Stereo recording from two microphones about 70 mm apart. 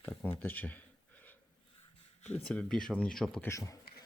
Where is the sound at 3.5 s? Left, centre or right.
Left.